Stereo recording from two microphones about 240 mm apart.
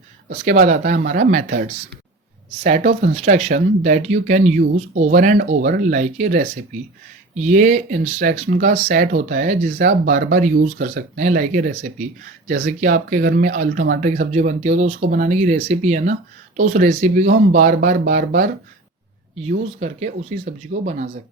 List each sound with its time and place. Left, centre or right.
0.3 s speech: right
2.6 s speech: right